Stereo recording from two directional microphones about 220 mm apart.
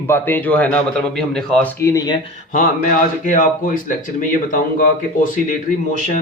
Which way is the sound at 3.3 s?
40° left (ahead or behind).